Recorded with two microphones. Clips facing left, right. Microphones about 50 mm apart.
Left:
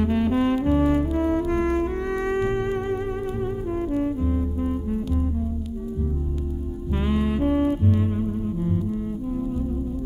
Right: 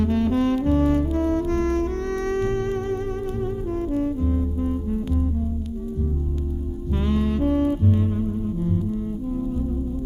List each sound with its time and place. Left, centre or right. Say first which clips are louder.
0.0 s music: even; centre
7.0 s saxophone: even; centre
8.0 s music: even; left